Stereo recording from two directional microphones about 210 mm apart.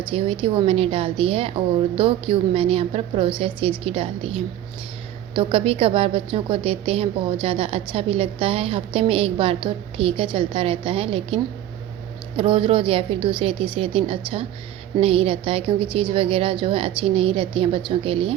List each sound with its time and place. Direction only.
0.1 s a woman's voice: 25° right (ahead or behind)
12.4 s a woman's voice: 25° right (ahead or behind)